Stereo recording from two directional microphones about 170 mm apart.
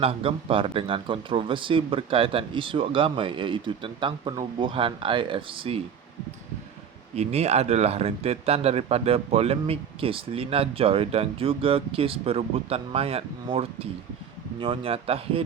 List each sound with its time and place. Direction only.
0.0 s speech: 35° right (ahead or behind)
7.2 s speech: 40° right (ahead or behind)